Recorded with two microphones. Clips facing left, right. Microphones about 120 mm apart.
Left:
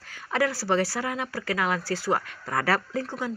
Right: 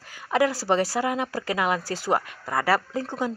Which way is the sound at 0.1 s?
15° right (ahead or behind).